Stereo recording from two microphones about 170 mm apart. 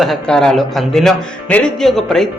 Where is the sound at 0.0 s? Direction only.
Centre (ahead or behind).